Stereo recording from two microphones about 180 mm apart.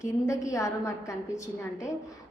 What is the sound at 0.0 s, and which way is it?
A woman's voice, 15° left (ahead or behind).